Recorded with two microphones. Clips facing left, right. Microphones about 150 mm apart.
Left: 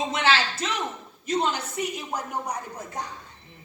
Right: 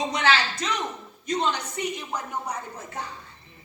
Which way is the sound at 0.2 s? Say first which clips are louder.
Even; 5° left (ahead or behind).